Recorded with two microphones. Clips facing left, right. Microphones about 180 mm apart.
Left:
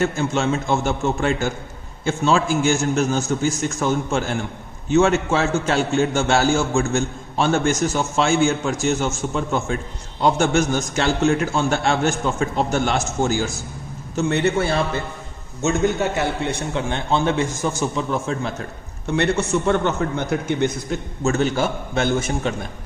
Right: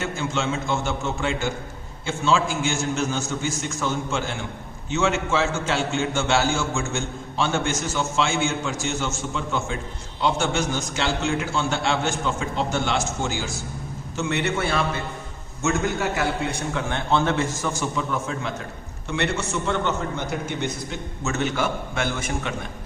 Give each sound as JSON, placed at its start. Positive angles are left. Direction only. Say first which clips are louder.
{"t": 0.0, "sound": "a man's voice", "louder": "left 6 dB", "side_deg": 40}
{"t": 16.7, "sound": "a man's voice", "louder": "left 1 dB", "side_deg": 20}
{"t": 18.1, "sound": "a man's voice", "louder": "left 4 dB", "side_deg": 35}
{"t": 19.1, "sound": "a man's voice", "louder": "left 6 dB", "side_deg": 45}
{"t": 21.2, "sound": "a man's voice", "louder": "left 5 dB", "side_deg": 30}